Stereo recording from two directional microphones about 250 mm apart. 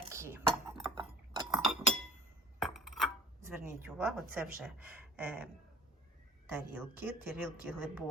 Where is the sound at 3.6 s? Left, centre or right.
Centre.